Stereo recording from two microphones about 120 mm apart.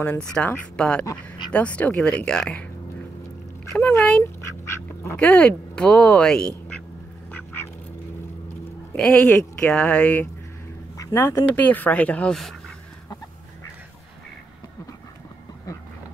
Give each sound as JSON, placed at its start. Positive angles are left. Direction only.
{"t": 0.0, "sound": "speech", "side_deg": 10}
{"t": 3.7, "sound": "speech", "side_deg": 10}
{"t": 4.2, "sound": "duck", "side_deg": 25}
{"t": 5.1, "sound": "speech", "side_deg": 10}
{"t": 7.2, "sound": "duck", "side_deg": 15}
{"t": 8.9, "sound": "speech", "side_deg": 5}
{"t": 11.1, "sound": "speech", "side_deg": 20}